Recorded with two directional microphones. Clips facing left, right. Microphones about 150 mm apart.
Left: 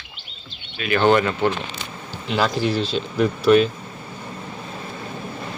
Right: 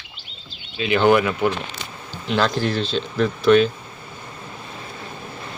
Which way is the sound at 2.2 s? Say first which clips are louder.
Even; 5° left (ahead or behind).